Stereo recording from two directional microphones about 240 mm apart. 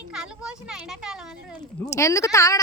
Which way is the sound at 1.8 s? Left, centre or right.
Centre.